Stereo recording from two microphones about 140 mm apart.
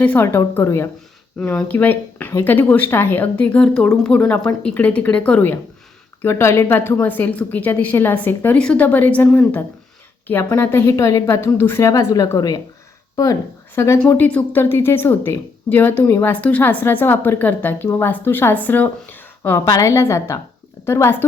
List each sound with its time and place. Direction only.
0.0 s a woman's voice: 15° left (ahead or behind)
13.7 s a woman's voice: 20° left (ahead or behind)